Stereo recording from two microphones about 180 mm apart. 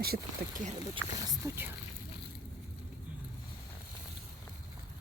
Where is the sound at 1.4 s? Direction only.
10° right (ahead or behind).